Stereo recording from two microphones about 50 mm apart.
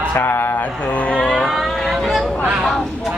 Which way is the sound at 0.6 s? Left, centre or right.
Left.